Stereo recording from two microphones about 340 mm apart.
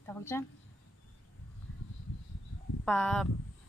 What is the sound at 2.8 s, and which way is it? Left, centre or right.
Speech, centre.